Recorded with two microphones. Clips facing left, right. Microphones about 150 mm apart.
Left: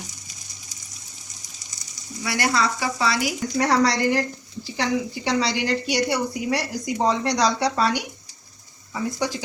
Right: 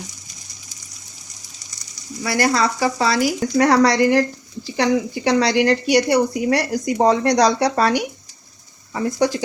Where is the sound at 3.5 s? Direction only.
60° right (ahead or behind).